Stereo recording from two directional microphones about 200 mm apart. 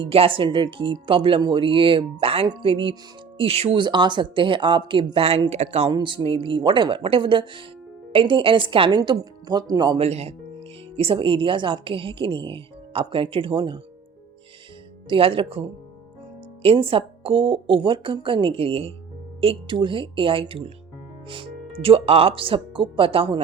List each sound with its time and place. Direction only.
0.0 s speech: 30° right (ahead or behind)
10.1 s speech: 30° right (ahead or behind)
15.1 s speech: 25° right (ahead or behind)
16.6 s speech: 25° right (ahead or behind)